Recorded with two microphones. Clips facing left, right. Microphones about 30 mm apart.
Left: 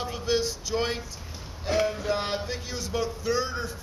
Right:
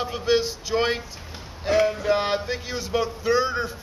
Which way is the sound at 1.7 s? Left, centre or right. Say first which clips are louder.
Right 5 dB; centre.